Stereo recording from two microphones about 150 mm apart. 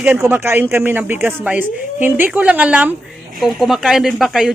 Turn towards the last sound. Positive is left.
turn(degrees=-5)  # may be behind; listen again after turning